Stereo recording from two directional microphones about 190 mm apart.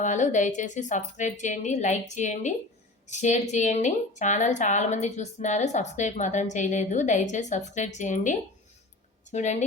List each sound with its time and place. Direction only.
0.0 s a woman's voice: 40° left (ahead or behind)